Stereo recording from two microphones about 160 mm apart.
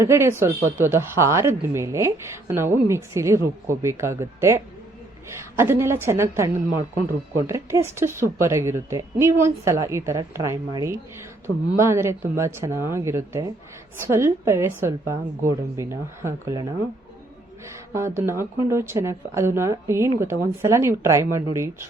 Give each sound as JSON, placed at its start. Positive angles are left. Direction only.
{"t": 0.0, "sound": "a woman's voice", "side_deg": -15}
{"t": 17.9, "sound": "a woman's voice", "side_deg": -15}